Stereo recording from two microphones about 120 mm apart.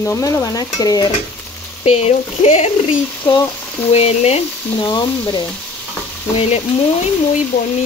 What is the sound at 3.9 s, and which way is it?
Speech, 60° left (ahead or behind).